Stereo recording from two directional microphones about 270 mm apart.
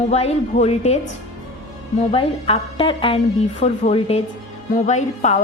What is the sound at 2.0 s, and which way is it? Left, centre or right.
A woman's voice, left.